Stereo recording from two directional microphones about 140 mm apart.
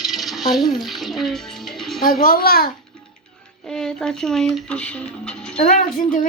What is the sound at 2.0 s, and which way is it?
Speech, 90° left.